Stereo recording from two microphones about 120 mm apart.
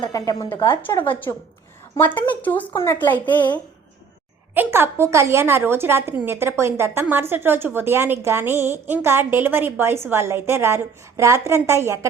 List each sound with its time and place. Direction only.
0.0 s a woman's voice: 35° left (ahead or behind)
2.0 s a woman's voice: 15° left (ahead or behind)
4.5 s a woman's voice: 20° right (ahead or behind)